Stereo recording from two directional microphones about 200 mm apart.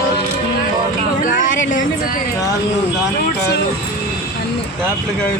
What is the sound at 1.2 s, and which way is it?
Speech, 40° left (ahead or behind).